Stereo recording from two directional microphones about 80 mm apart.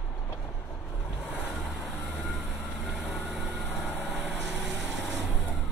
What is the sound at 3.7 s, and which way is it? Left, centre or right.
Vehicle, left.